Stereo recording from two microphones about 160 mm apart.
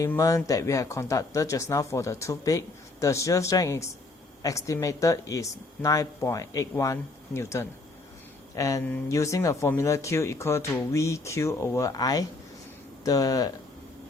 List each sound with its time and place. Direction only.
0.0 s speech: 20° left (ahead or behind)